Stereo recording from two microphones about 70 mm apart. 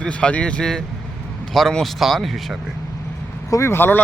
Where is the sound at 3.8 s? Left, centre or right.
Left.